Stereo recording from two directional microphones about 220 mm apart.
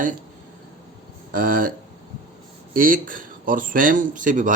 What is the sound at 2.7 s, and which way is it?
Speech, 40° right (ahead or behind).